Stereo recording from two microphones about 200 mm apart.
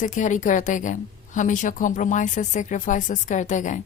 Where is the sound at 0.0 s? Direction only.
40° left (ahead or behind).